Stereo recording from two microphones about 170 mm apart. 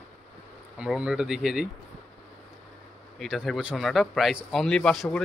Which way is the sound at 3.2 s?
Centre (ahead or behind).